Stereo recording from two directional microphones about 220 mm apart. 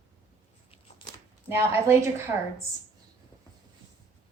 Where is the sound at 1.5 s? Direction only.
10° right (ahead or behind).